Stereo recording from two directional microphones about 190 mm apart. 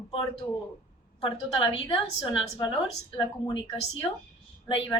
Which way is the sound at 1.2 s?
25° left (ahead or behind).